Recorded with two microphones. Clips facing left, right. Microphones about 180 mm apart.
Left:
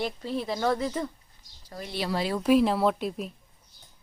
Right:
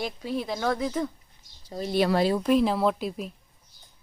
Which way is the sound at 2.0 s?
55° right (ahead or behind).